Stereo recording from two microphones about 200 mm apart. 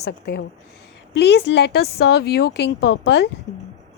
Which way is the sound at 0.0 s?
55° left (ahead or behind).